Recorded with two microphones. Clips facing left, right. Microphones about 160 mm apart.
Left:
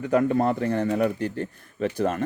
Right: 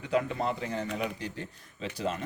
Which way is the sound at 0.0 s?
45° left (ahead or behind).